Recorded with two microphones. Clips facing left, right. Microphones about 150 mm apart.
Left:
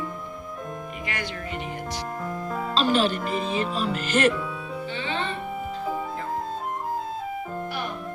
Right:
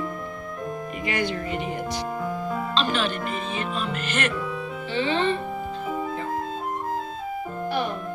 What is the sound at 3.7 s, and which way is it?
Speech, 35° left (ahead or behind).